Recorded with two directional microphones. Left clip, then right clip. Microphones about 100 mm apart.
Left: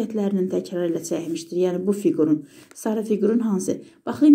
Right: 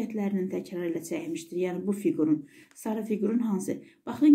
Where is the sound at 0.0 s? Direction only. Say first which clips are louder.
Left 8 dB; 35° left (ahead or behind).